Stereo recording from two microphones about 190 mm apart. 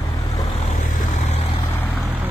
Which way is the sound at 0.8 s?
40° left (ahead or behind).